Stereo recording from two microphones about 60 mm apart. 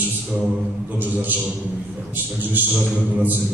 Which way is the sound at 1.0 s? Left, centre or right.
Right.